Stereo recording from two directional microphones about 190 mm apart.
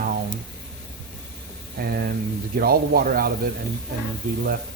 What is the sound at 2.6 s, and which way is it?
Speech, 50° right (ahead or behind).